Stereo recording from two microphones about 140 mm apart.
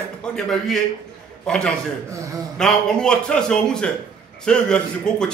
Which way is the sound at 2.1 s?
20° right (ahead or behind).